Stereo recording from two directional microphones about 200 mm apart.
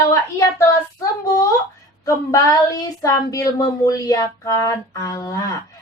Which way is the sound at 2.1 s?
15° left (ahead or behind).